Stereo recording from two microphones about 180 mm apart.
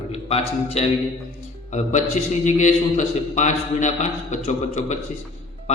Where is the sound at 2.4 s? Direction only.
40° left (ahead or behind).